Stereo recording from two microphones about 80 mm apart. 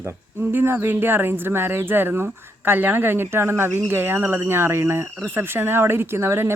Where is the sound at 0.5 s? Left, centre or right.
Right.